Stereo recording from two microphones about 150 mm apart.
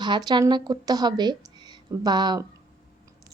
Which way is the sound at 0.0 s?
30° right (ahead or behind).